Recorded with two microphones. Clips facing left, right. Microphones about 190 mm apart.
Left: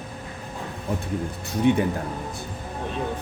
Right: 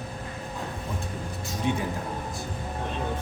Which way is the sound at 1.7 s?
60° left (ahead or behind).